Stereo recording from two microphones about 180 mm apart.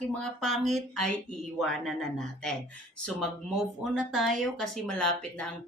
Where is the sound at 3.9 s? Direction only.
Centre (ahead or behind).